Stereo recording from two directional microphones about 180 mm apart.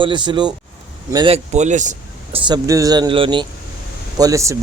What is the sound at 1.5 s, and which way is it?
Speech, 40° right (ahead or behind).